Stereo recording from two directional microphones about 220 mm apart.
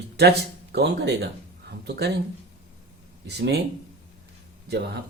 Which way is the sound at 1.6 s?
50° right (ahead or behind).